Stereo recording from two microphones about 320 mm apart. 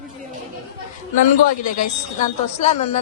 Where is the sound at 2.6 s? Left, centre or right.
Left.